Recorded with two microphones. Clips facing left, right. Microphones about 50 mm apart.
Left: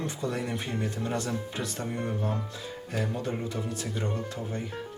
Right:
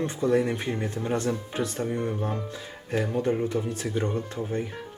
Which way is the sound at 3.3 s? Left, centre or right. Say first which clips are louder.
Right 6 dB; right.